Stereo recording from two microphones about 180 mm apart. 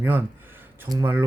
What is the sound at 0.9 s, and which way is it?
Speech, 20° right (ahead or behind).